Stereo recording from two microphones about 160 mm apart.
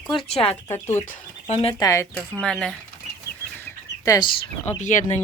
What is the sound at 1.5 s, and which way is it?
Speech, 40° left (ahead or behind).